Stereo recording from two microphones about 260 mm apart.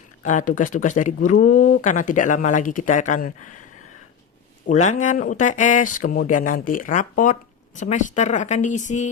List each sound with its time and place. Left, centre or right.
0.2 s speech: left
4.6 s speech: left